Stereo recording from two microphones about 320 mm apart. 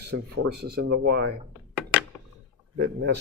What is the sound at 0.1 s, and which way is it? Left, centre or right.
Speech, right.